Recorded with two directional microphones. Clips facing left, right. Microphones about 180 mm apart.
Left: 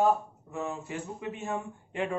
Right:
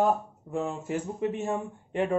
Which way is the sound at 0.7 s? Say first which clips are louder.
Right 5 dB; 45° right (ahead or behind).